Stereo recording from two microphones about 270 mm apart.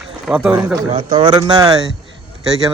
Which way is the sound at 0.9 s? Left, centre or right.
Centre.